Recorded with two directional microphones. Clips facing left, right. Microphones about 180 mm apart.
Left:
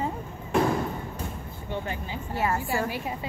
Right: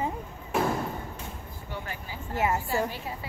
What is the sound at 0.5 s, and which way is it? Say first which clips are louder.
Thump: left 3 dB; 5° right (ahead or behind).